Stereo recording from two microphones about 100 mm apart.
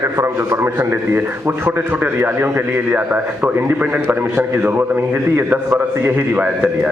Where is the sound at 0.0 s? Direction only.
30° right (ahead or behind).